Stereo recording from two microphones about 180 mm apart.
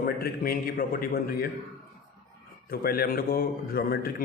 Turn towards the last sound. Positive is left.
turn(degrees=60)  # may be behind; listen again after turning